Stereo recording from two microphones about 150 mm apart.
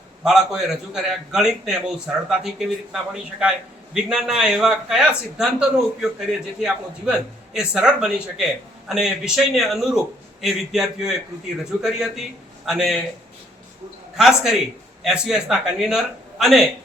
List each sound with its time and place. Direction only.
0.3 s a man's voice: 5° right (ahead or behind)
14.2 s a man's voice: centre (ahead or behind)